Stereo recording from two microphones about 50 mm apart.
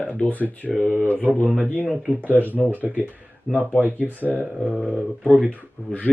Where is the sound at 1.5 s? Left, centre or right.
Right.